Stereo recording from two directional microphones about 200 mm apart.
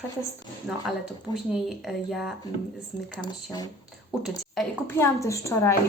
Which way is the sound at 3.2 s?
20° left (ahead or behind).